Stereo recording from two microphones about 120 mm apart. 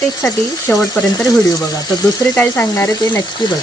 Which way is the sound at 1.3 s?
30° left (ahead or behind).